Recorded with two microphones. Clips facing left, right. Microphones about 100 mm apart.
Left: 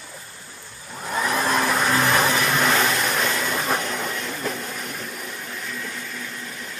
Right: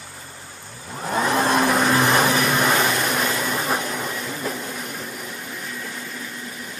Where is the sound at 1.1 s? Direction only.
25° right (ahead or behind); by 4.6 s 10° right (ahead or behind).